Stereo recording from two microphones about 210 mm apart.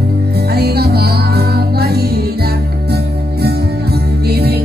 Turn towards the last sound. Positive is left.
turn(degrees=-50)  # may be behind; listen again after turning